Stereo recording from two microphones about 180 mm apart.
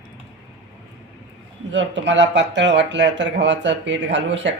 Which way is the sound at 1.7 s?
85° right.